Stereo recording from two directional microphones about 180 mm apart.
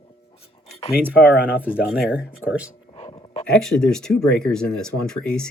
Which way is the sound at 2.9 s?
30° left (ahead or behind).